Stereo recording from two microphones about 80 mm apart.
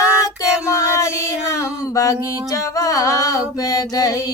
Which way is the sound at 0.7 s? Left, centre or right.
Left.